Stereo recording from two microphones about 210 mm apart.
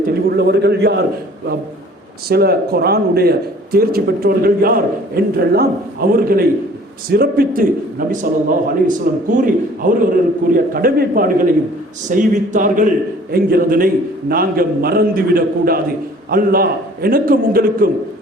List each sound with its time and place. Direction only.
0.3 s a man's voice: 50° right (ahead or behind)
2.3 s a man's voice: 45° right (ahead or behind)